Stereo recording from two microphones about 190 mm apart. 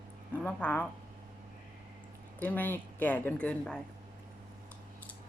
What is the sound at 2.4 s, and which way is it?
Speech, 10° left (ahead or behind).